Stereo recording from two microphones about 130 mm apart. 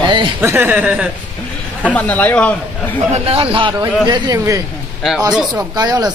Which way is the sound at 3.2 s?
45° right (ahead or behind).